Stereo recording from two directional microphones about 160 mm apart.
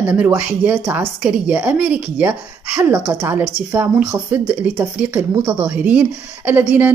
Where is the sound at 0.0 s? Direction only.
10° right (ahead or behind).